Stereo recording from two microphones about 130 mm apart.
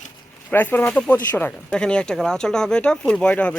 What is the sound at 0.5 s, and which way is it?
Speech, 15° left (ahead or behind).